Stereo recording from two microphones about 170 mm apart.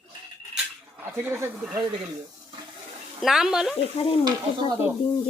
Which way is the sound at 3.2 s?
Centre (ahead or behind).